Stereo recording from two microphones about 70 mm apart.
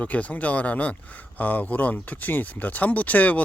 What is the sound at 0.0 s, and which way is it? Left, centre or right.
Speech, left.